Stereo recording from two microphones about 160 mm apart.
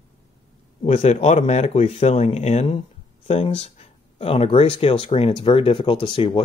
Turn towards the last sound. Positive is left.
turn(degrees=30)  # may be behind; listen again after turning